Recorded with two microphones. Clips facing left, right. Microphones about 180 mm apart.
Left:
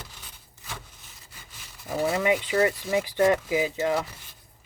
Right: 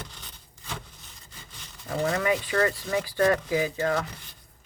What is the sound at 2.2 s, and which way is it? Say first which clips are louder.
Speech: left 4 dB; 20° left (ahead or behind).